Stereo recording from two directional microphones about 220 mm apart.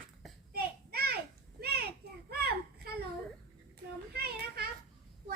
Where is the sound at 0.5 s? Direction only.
45° right (ahead or behind).